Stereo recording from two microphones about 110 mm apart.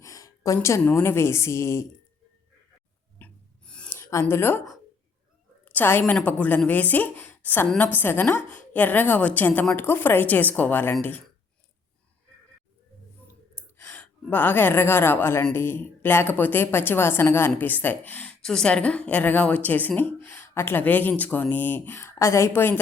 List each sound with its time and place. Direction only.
0.0 s a woman's voice: 30° left (ahead or behind)
3.2 s filing: 10° left (ahead or behind)
3.8 s speech: 25° left (ahead or behind)
5.6 s a woman's voice: 15° left (ahead or behind)
13.6 s a woman's voice: 15° left (ahead or behind)